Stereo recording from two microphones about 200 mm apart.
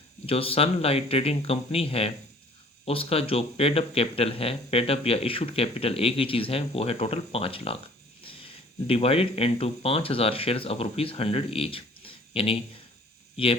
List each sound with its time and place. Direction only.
0.3 s speech: 30° left (ahead or behind)
8.9 s speech: 30° left (ahead or behind)